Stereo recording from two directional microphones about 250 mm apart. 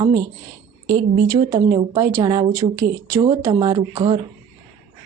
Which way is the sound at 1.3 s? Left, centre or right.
Centre.